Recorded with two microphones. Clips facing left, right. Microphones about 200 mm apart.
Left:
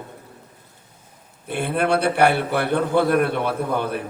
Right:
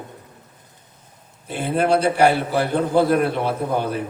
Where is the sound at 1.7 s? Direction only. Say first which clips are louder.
Right 2 dB; 60° left (ahead or behind).